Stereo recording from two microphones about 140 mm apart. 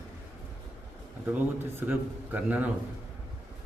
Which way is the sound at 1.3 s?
15° right (ahead or behind).